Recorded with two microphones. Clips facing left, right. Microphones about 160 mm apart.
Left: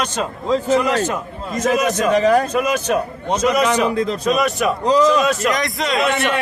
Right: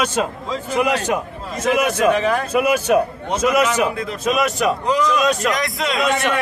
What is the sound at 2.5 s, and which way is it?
A man's voice, 10° right (ahead or behind).